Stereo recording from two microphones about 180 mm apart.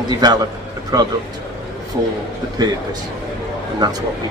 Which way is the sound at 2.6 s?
20° right (ahead or behind).